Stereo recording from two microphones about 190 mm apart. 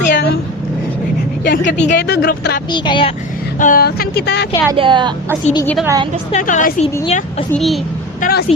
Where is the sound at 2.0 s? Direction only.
60° left (ahead or behind).